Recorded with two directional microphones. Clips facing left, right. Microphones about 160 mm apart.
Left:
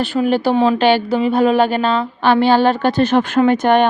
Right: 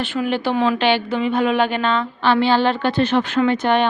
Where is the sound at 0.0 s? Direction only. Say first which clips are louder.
Left 5 dB; 40° left (ahead or behind).